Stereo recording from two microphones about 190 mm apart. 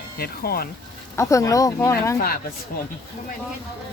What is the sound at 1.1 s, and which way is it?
A woman's voice, 15° left (ahead or behind).